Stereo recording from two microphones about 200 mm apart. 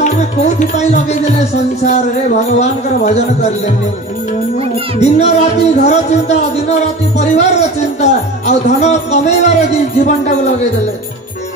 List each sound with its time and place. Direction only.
0.0 s music: 35° left (ahead or behind)
4.9 s music: 35° left (ahead or behind)